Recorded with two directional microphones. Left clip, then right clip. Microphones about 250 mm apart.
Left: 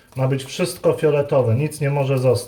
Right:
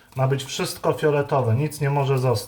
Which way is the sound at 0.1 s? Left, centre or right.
Right.